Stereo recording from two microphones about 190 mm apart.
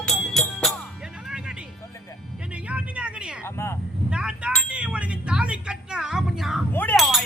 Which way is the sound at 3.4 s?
15° left (ahead or behind).